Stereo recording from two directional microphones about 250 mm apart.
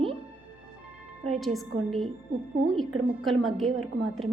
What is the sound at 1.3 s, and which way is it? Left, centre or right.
Speech, centre.